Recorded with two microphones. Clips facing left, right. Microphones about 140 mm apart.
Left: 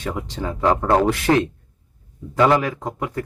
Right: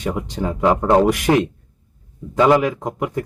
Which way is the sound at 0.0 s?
20° right (ahead or behind).